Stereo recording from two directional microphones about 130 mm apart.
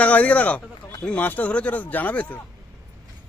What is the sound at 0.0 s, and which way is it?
Speech, 10° left (ahead or behind).